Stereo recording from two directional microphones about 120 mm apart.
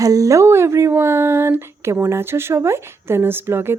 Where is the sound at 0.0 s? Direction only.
30° right (ahead or behind).